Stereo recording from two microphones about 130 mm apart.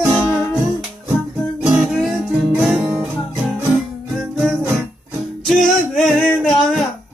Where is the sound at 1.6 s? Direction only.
5° right (ahead or behind).